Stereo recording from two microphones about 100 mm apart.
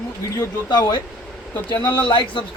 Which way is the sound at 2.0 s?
55° left (ahead or behind).